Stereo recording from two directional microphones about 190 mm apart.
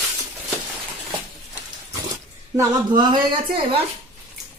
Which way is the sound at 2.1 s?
20° right (ahead or behind).